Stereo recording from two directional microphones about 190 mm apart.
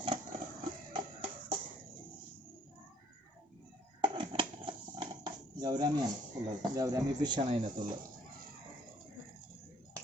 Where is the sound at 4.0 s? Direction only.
25° right (ahead or behind).